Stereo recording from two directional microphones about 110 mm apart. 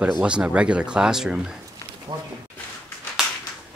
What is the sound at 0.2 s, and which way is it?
Speech, 10° right (ahead or behind).